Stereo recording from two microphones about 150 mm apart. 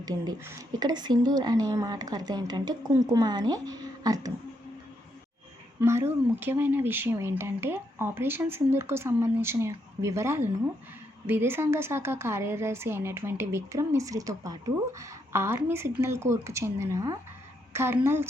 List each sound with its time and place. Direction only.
0.0 s a woman's voice: 25° right (ahead or behind)
5.8 s speech: 15° right (ahead or behind)